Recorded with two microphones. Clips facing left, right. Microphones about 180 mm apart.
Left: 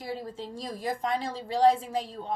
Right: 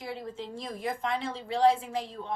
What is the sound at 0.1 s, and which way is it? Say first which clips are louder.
A woman's voice: left 2 dB; 35° left (ahead or behind).